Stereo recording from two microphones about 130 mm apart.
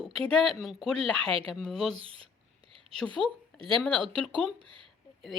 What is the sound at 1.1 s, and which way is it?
Speech, 40° right (ahead or behind).